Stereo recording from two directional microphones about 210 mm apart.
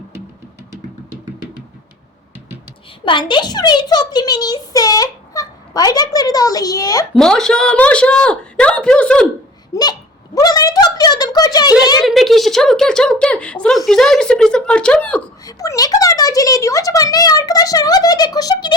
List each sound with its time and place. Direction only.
3.0 s a child's voice: 25° left (ahead or behind)
7.1 s a woman's voice: 5° left (ahead or behind)
9.7 s a child's voice: 15° left (ahead or behind)
12.0 s a woman's voice: centre (ahead or behind)
15.4 s a child's voice: 15° left (ahead or behind)